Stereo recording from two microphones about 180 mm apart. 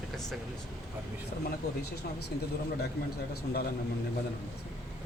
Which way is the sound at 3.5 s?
55° left (ahead or behind).